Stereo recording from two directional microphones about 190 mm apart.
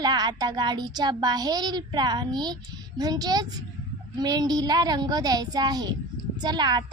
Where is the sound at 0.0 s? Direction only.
20° right (ahead or behind).